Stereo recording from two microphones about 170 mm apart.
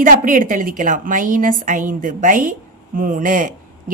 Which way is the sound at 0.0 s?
50° right (ahead or behind).